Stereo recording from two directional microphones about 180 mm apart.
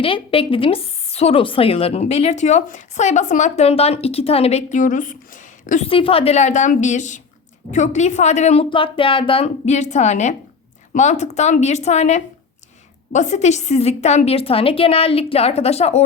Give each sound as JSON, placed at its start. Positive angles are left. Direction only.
{"t": 0.0, "sound": "a woman's voice", "side_deg": 30}
{"t": 5.9, "sound": "a woman's voice", "side_deg": 30}